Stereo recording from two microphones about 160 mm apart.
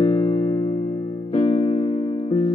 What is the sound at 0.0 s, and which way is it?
Music, 35° left (ahead or behind).